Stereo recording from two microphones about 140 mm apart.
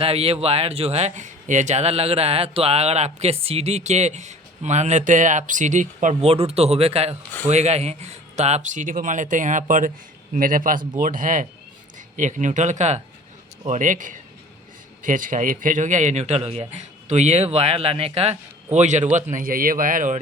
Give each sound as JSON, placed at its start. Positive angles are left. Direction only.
{"t": 0.0, "sound": "speech", "side_deg": -45}
{"t": 6.2, "sound": "speech", "side_deg": -45}
{"t": 19.1, "sound": "speech", "side_deg": -75}